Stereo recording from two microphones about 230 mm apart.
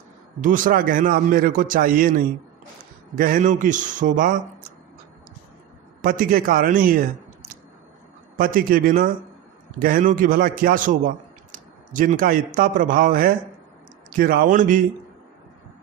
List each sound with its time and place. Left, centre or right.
0.4 s a man's voice: right
6.0 s a man's voice: right
8.4 s a man's voice: right